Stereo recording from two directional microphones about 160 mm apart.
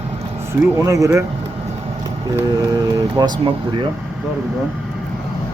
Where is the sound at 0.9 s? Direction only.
20° right (ahead or behind).